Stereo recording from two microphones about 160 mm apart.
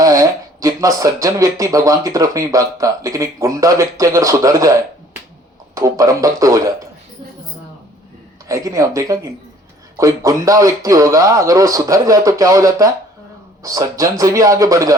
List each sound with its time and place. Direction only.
0.0 s speech: 20° right (ahead or behind)
8.4 s speech: 20° right (ahead or behind)